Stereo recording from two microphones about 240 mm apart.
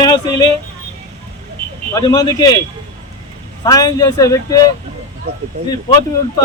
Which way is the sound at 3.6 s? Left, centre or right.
Centre.